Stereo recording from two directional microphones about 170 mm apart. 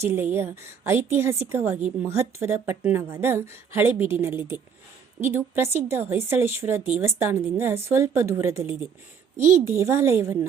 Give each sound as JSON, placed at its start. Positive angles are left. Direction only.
{"t": 0.0, "sound": "speech", "side_deg": -15}